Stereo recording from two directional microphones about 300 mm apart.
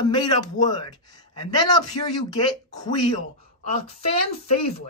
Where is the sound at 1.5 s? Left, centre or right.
Centre.